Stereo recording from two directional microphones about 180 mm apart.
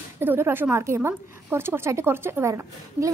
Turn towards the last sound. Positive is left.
turn(degrees=-15)  # may be behind; listen again after turning